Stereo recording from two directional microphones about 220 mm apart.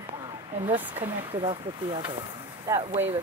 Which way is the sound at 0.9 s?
25° right (ahead or behind).